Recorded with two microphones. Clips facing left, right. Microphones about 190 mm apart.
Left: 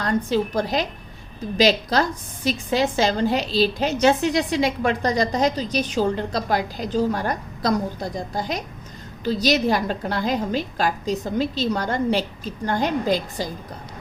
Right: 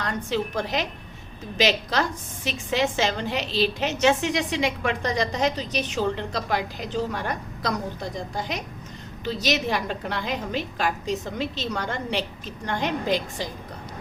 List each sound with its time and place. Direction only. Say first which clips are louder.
0.0 s a woman's voice: left 5 dB; 35° left (ahead or behind)